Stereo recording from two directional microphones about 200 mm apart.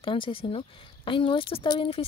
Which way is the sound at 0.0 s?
25° left (ahead or behind).